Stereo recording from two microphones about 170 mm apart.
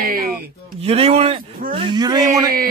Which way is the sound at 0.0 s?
60° right (ahead or behind).